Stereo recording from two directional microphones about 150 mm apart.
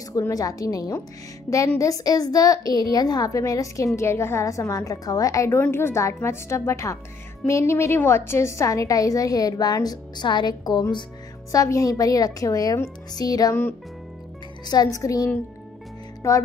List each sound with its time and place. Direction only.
0.1 s a woman's voice: 25° left (ahead or behind)
14.7 s a woman's voice: 25° left (ahead or behind)